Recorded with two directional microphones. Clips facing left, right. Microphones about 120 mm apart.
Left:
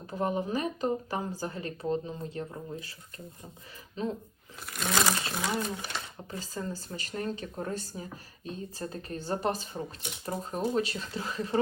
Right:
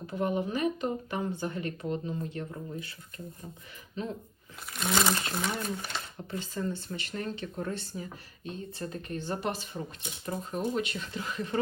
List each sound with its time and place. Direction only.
0.1 s speech: 35° left (ahead or behind)
3.2 s crumpling: centre (ahead or behind)
4.0 s speech: 35° left (ahead or behind)
4.6 s crumpling: centre (ahead or behind)
5.5 s speech: 25° left (ahead or behind)
5.7 s speech: centre (ahead or behind)
6.3 s speech: 35° left (ahead or behind)